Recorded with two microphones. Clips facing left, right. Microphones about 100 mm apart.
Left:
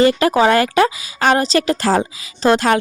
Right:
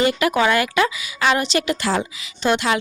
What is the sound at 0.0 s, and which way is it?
Speech, 35° left (ahead or behind).